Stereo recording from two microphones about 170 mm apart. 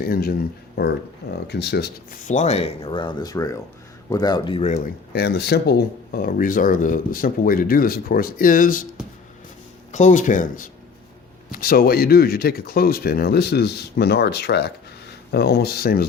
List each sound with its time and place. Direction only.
0.0 s speech: 60° left (ahead or behind)
0.8 s speech: 75° left (ahead or behind)
2.2 s speech: 45° left (ahead or behind); by 4.6 s 25° left (ahead or behind)
5.1 s speech: 70° left (ahead or behind); by 8.9 s 50° left (ahead or behind)
9.9 s speech: 45° left (ahead or behind); by 16.0 s 65° left (ahead or behind)